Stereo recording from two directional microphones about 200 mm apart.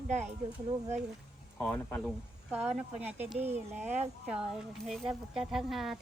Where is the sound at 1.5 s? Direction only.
5° left (ahead or behind).